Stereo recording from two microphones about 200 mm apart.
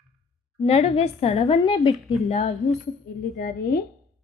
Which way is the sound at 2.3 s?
35° left (ahead or behind).